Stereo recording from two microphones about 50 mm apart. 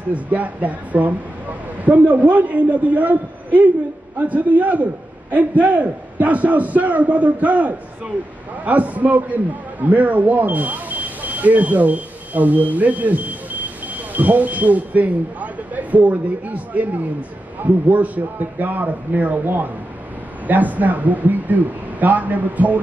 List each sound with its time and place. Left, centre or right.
0.1 s a man's voice: right